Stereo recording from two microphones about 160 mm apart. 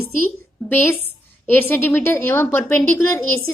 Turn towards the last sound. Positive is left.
turn(degrees=15)  # may be behind; listen again after turning